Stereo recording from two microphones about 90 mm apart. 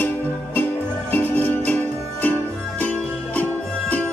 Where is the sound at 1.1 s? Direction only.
15° left (ahead or behind).